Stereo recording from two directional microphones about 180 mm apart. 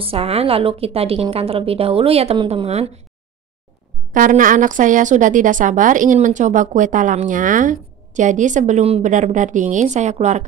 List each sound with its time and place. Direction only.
0.0 s a woman's voice: 35° right (ahead or behind)
4.1 s a woman's voice: 45° right (ahead or behind)